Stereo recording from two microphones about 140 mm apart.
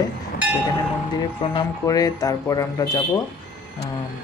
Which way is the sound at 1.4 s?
45° left (ahead or behind).